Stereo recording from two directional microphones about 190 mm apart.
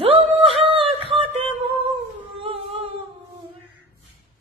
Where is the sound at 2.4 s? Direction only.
30° right (ahead or behind).